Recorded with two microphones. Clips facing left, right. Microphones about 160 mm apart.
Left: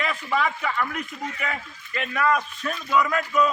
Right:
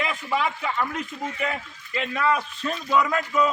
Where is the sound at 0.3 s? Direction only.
20° right (ahead or behind).